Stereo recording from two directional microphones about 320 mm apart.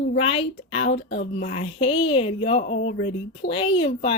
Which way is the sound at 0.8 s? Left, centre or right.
Left.